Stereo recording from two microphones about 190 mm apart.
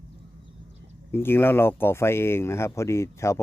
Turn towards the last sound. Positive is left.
turn(degrees=15)  # may be behind; listen again after turning